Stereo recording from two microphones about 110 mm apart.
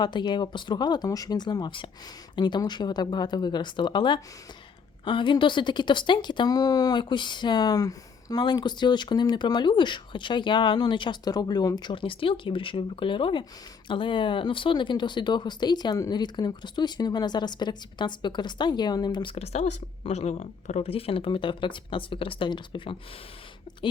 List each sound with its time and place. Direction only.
0.0 s speech: 45° left (ahead or behind)